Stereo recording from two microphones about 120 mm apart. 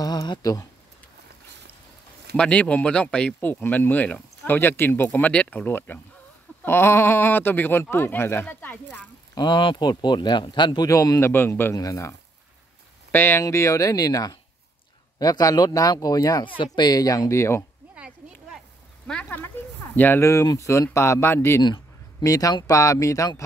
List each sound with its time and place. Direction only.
0.0 s a sound: 35° left (ahead or behind)
2.3 s speech: 10° left (ahead or behind)
9.3 s speech: 40° left (ahead or behind)
10.9 s speech: 25° left (ahead or behind)
16.4 s speech: 45° left (ahead or behind); by 17.6 s 25° left (ahead or behind)
17.9 s a sound: 10° right (ahead or behind)
19.0 s speech: 10° left (ahead or behind)
21.6 s speech: 35° left (ahead or behind)